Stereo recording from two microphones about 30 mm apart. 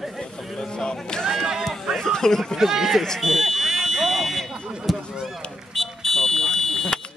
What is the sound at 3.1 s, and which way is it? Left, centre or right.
Smoke detector, centre.